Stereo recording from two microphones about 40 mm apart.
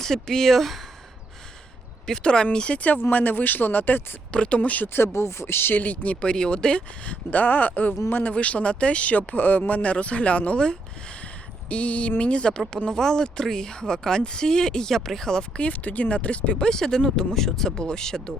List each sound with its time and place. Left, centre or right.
0.0 s speech: centre
2.0 s speech: centre
2.7 s speech: left
4.3 s speech: left
5.4 s speech: left
5.7 s speech: left
6.2 s speech: left
11.7 s speech: left
12.4 s speech: left
15.6 s speech: left
16.6 s speech: centre